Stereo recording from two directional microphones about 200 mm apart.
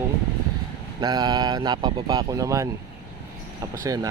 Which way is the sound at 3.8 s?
15° right (ahead or behind).